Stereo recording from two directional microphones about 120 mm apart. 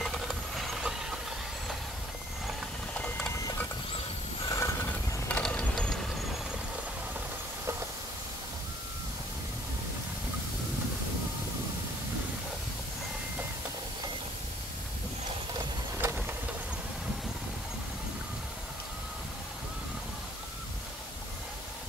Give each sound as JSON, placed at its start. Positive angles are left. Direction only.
{"t": 0.0, "sound": "vehicle", "side_deg": 0}
{"t": 4.5, "sound": "pulleys", "side_deg": 25}
{"t": 5.3, "sound": "vehicle", "side_deg": 10}
{"t": 16.0, "sound": "vehicle", "side_deg": -20}